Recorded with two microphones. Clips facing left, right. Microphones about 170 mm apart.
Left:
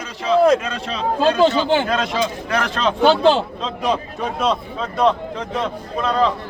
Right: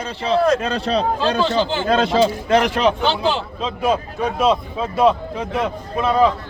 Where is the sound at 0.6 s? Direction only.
35° right (ahead or behind).